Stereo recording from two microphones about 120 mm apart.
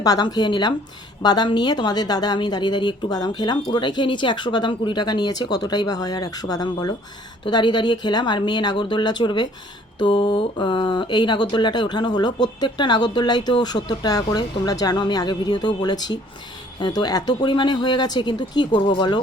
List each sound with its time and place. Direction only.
0.0 s speech: 35° left (ahead or behind)